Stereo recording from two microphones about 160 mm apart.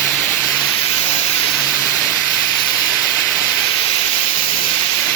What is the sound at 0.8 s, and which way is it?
Steam, 40° left (ahead or behind).